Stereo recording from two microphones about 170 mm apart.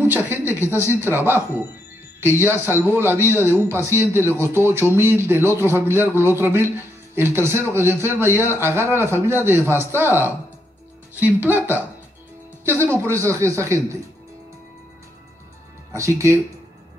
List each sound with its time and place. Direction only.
0.0 s a man's voice: 10° right (ahead or behind)
15.9 s a man's voice: 15° right (ahead or behind)